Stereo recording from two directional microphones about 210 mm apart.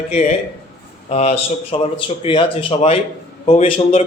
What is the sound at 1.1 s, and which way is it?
Speech, 30° left (ahead or behind).